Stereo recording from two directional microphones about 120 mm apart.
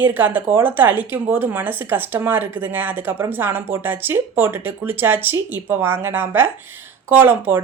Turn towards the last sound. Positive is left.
turn(degrees=-15)  # may be behind; listen again after turning